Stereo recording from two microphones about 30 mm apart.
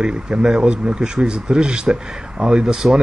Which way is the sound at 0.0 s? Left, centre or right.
Right.